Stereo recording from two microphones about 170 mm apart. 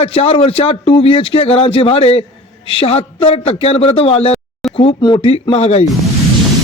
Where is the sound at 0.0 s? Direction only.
35° left (ahead or behind).